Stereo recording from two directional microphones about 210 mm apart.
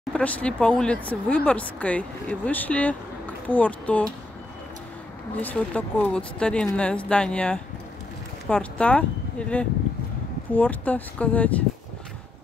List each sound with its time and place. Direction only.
0.1 s speech: 5° left (ahead or behind)
5.4 s speech: 5° left (ahead or behind)